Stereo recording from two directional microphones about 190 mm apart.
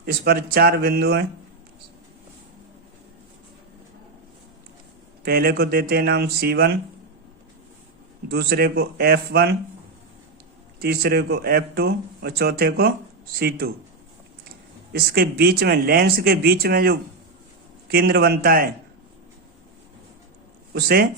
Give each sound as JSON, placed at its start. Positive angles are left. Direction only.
{"t": 0.0, "sound": "speech", "side_deg": -50}
{"t": 5.2, "sound": "speech", "side_deg": -55}
{"t": 8.3, "sound": "speech", "side_deg": -55}
{"t": 10.8, "sound": "speech", "side_deg": -55}
{"t": 14.9, "sound": "speech", "side_deg": -50}
{"t": 20.7, "sound": "speech", "side_deg": -55}